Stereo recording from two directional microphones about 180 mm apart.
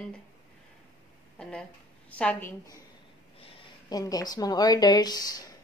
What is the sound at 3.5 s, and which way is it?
Speech, 20° left (ahead or behind).